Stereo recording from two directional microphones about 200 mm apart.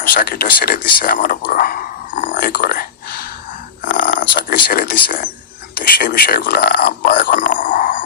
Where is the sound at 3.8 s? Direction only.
45° left (ahead or behind).